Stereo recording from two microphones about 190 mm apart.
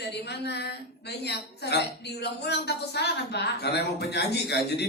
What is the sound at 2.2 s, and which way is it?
A woman's voice, 60° left (ahead or behind).